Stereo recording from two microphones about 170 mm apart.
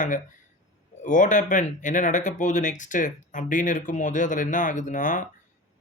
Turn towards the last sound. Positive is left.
turn(degrees=50)  # may be behind; listen again after turning